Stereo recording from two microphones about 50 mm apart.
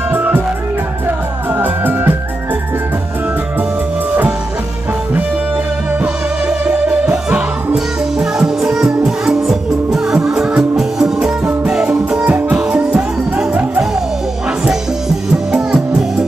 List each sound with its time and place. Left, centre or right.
0.1 s music: right
5.9 s music: right; by 11.3 s centre
11.4 s music: right
15.5 s music: centre